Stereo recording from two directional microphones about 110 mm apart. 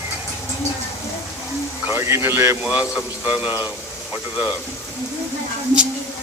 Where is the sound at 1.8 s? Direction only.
20° right (ahead or behind).